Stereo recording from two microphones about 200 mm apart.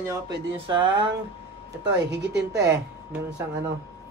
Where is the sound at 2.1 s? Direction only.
60° right (ahead or behind).